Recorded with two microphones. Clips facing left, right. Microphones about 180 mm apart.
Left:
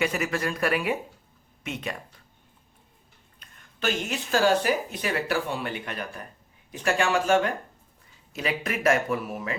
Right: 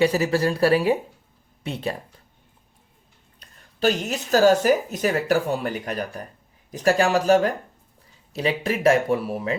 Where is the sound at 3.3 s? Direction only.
35° right (ahead or behind).